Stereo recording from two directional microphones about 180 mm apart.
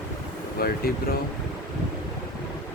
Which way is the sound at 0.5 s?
55° left (ahead or behind).